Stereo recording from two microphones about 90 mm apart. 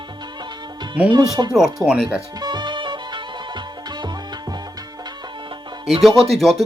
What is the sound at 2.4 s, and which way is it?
Music, 55° right (ahead or behind).